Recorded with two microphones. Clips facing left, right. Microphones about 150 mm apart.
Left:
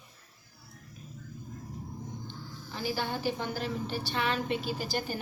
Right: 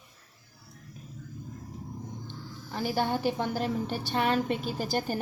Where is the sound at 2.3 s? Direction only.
50° right (ahead or behind).